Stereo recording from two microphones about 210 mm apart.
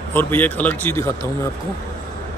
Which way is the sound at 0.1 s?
10° left (ahead or behind).